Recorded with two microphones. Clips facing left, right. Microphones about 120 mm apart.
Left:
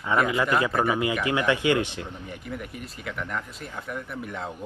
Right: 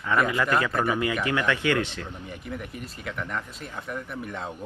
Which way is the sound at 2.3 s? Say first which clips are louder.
Even; centre (ahead or behind).